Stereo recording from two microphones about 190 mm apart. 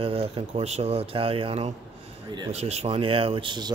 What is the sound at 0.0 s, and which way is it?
Speech, 30° right (ahead or behind).